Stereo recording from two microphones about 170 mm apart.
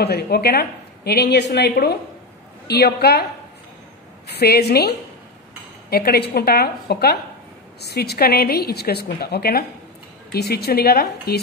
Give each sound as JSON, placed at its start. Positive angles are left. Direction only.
{"t": 0.0, "sound": "a woman's voice", "side_deg": 70}
{"t": 4.4, "sound": "a woman's voice", "side_deg": 70}